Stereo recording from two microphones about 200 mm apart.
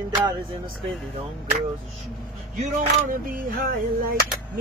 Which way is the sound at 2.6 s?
45° right (ahead or behind).